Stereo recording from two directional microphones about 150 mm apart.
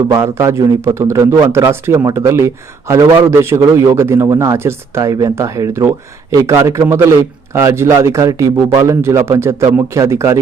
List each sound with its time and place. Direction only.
0.0 s speech: 20° right (ahead or behind)